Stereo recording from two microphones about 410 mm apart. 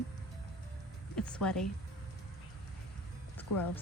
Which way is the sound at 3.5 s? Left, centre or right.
Left.